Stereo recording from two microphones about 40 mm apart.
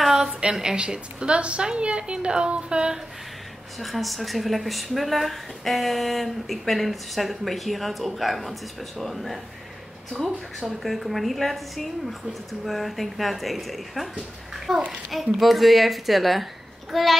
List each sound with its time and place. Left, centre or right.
0.0 s a sound: centre
0.5 s a woman's voice: centre
3.8 s speech: centre